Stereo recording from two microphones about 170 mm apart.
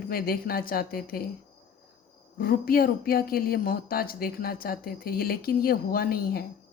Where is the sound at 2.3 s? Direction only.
60° left (ahead or behind).